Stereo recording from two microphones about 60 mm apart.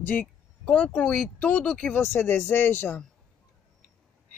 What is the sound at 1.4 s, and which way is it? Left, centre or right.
Speech, left.